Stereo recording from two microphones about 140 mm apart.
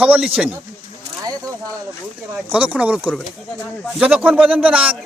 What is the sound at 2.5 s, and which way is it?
Speech, 10° right (ahead or behind).